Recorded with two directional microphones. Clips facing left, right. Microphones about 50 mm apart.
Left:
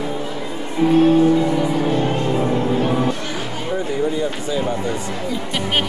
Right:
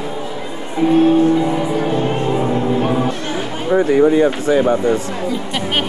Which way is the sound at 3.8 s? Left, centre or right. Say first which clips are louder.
Right 10 dB; right.